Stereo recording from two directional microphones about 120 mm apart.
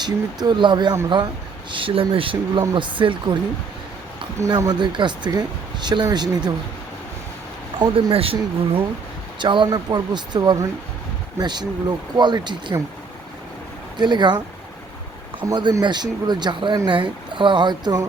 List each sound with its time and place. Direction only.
0.0 s speech: 35° right (ahead or behind)
4.4 s speech: 30° right (ahead or behind)
7.8 s speech: 50° right (ahead or behind)
9.4 s speech: 40° right (ahead or behind)
14.0 s speech: 40° right (ahead or behind)
15.4 s speech: 30° right (ahead or behind)